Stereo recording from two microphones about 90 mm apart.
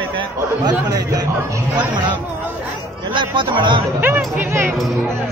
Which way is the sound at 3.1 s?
65° right (ahead or behind).